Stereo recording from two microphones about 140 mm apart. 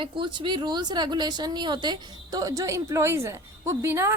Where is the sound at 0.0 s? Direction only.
35° right (ahead or behind).